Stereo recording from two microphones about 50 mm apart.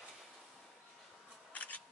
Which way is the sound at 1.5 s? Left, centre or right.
Left.